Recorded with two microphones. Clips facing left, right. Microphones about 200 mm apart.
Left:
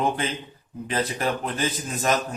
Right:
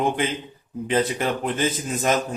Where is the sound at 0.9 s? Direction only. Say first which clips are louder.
Right 3 dB; 25° right (ahead or behind).